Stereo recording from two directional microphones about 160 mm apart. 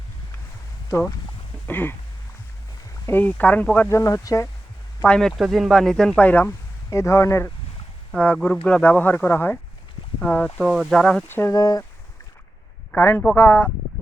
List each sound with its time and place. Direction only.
0.9 s speech: 20° left (ahead or behind)
1.6 s a sound: 10° left (ahead or behind)
3.1 s speech: 10° left (ahead or behind)
5.0 s speech: 5° left (ahead or behind)
8.1 s speech: 5° left (ahead or behind); by 11.9 s 25° left (ahead or behind)
12.9 s speech: 10° left (ahead or behind)